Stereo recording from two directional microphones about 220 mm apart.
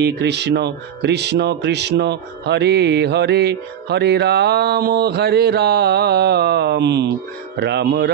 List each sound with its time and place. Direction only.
0.0 s speech: 50° right (ahead or behind)